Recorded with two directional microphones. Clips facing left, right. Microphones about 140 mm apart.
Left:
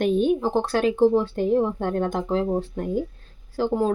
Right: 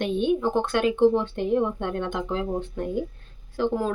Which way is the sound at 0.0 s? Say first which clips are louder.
Left 3 dB; 40° left (ahead or behind).